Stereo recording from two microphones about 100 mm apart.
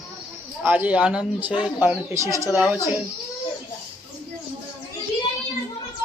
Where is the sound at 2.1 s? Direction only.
30° right (ahead or behind).